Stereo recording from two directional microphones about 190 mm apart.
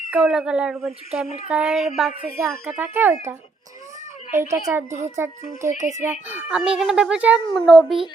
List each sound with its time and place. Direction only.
0.1 s a child's voice: 5° right (ahead or behind)
4.9 s a child's voice: 35° right (ahead or behind)
5.1 s a child's voice: 15° right (ahead or behind); by 7.9 s centre (ahead or behind)